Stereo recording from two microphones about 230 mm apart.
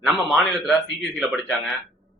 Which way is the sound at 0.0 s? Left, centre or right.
Centre.